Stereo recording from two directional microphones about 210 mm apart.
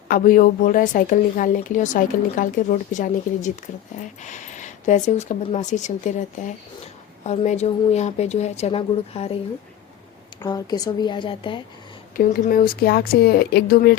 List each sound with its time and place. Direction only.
0.1 s a woman's voice: 40° left (ahead or behind)
7.3 s a woman's voice: 30° left (ahead or behind)
10.4 s a woman's voice: 20° left (ahead or behind)
12.1 s speech: 40° left (ahead or behind)